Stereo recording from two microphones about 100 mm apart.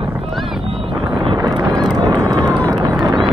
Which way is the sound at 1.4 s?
40° right (ahead or behind).